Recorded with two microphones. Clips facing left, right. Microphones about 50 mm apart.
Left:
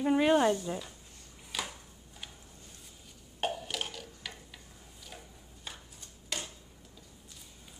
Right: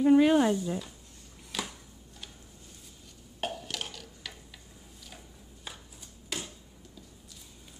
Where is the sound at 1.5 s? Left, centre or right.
Centre.